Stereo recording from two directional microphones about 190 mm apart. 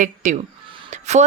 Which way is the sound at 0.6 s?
25° right (ahead or behind).